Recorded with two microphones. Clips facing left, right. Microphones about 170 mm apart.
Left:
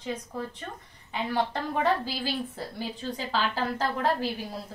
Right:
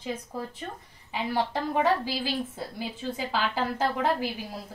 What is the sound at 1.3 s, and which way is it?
Speech, 5° right (ahead or behind).